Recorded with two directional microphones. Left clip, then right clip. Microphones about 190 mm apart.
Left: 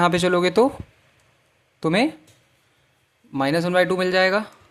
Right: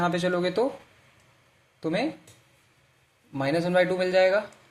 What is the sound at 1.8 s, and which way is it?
Speech, 35° left (ahead or behind).